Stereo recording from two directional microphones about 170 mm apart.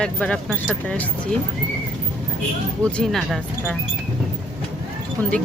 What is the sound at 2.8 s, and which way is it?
Speech, 5° left (ahead or behind).